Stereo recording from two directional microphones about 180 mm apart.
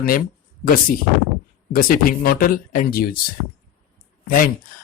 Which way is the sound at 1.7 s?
55° left (ahead or behind).